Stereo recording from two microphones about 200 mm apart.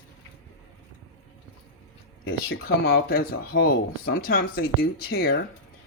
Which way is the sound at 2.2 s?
50° left (ahead or behind).